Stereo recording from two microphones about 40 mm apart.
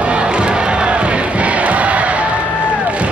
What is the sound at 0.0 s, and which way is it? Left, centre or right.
Crowd, right.